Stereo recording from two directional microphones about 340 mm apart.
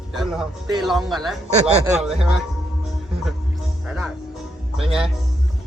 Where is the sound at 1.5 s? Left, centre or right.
Centre.